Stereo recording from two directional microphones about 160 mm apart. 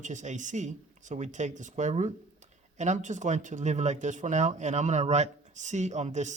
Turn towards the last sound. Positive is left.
turn(degrees=-45)  # may be behind; listen again after turning